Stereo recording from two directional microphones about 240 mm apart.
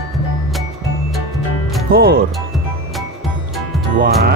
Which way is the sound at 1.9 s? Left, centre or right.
Right.